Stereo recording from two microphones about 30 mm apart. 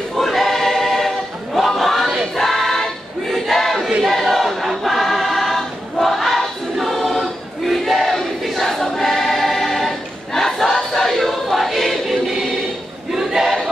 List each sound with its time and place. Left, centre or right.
0.1 s choir: centre
7.6 s battle cry: centre
8.6 s choir: centre
13.1 s choir: centre